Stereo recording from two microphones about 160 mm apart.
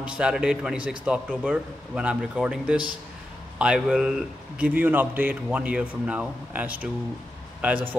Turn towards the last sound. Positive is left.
turn(degrees=-10)  # may be behind; listen again after turning